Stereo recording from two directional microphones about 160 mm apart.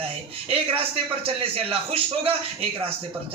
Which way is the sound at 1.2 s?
35° right (ahead or behind).